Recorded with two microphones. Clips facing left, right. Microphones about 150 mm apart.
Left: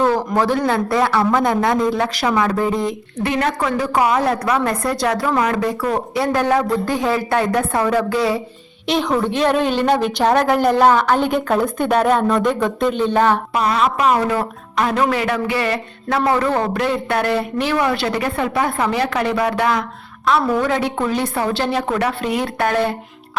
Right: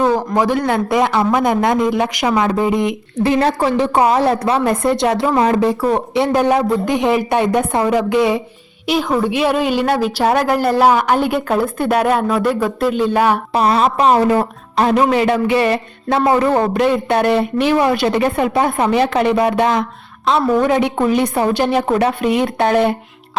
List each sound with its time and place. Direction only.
0.0 s a man's voice: 15° right (ahead or behind)
3.2 s a woman's voice: 30° right (ahead or behind)
8.9 s a woman's voice: 5° right (ahead or behind)
13.5 s a woman's voice: 35° right (ahead or behind)